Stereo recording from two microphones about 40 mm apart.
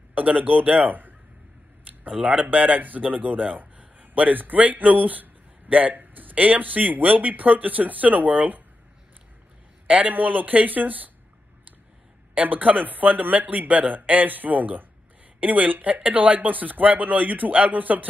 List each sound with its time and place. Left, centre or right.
0.1 s a man's voice: right
2.0 s a man's voice: right
9.8 s a man's voice: right
10.1 s a man's voice: right
12.4 s a man's voice: right